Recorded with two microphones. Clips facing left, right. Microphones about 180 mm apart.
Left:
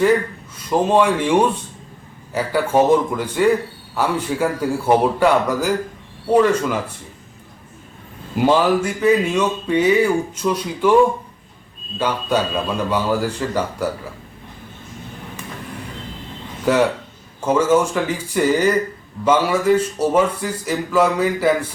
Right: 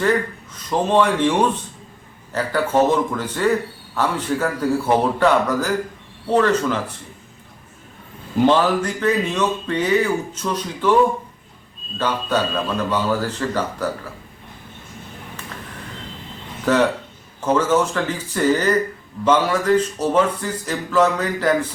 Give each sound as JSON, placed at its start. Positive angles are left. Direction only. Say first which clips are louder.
{"t": 0.5, "sound": "speech", "louder": "left 2 dB", "side_deg": 10}
{"t": 8.4, "sound": "speech", "louder": "left 1 dB", "side_deg": 10}
{"t": 11.9, "sound": "speech", "louder": "left 1 dB", "side_deg": 10}
{"t": 16.7, "sound": "speech", "louder": "left 1 dB", "side_deg": 10}